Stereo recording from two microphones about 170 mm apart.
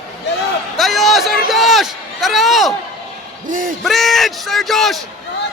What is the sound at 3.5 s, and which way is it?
Speech, 50° right (ahead or behind).